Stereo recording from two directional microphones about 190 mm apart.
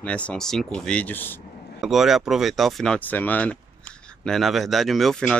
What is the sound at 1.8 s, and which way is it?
Speech, centre (ahead or behind).